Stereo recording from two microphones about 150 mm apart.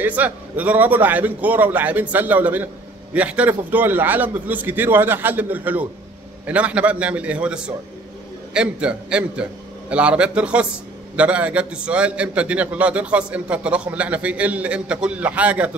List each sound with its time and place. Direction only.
0.0 s a man's voice: 10° right (ahead or behind)